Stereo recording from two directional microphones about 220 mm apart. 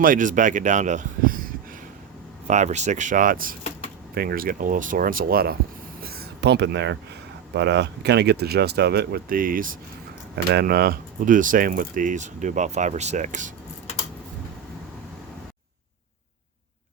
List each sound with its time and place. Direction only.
0.0 s speech: 35° right (ahead or behind)
6.0 s a sound: 45° right (ahead or behind)
7.5 s speech: 50° right (ahead or behind); by 13.5 s 35° right (ahead or behind)